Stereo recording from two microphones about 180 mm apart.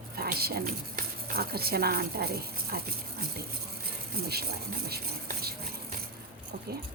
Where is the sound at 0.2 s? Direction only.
60° right (ahead or behind).